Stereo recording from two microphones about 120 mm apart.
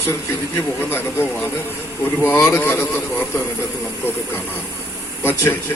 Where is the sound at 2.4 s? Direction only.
15° left (ahead or behind).